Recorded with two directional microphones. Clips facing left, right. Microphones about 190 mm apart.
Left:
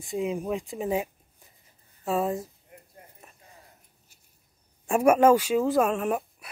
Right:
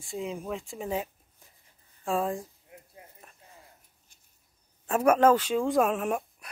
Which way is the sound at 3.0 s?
Centre (ahead or behind).